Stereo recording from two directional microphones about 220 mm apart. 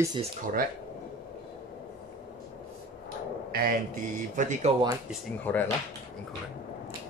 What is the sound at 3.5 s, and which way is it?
Speech, 45° right (ahead or behind).